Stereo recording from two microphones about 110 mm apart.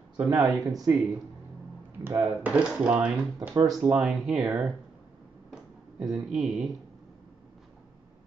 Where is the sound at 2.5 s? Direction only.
10° right (ahead or behind).